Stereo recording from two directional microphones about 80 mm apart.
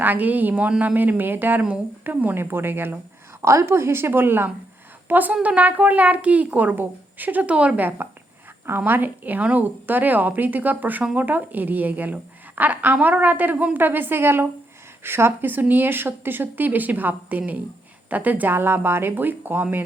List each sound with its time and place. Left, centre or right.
0.0 s a woman's voice: right
3.4 s a woman's voice: right